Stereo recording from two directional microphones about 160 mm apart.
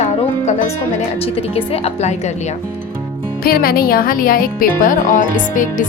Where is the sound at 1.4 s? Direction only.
40° left (ahead or behind).